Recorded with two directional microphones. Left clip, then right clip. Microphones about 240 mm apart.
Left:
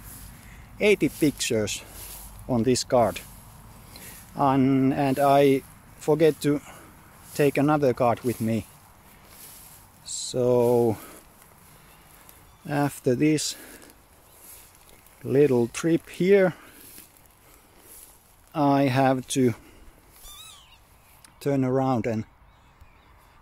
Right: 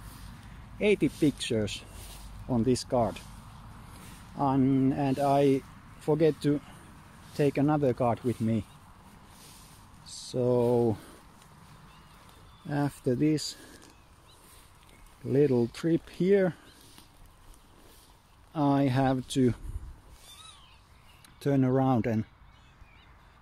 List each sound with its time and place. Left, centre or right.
0.7 s speech: centre
4.4 s speech: centre
10.0 s speech: centre
12.6 s speech: centre
15.2 s speech: centre
18.5 s speech: centre
21.4 s speech: centre